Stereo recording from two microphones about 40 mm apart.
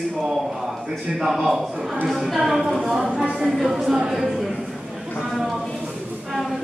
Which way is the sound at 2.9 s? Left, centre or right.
Centre.